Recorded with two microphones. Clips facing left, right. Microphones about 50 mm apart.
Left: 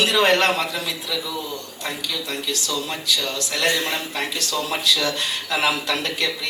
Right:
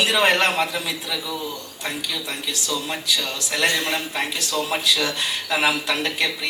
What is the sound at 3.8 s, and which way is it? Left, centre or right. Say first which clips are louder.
Speech: right 1 dB; right.